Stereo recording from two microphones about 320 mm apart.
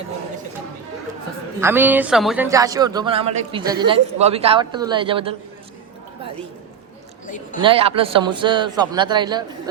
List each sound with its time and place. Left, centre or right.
1.6 s speech: centre
7.3 s speech: left
7.6 s speech: centre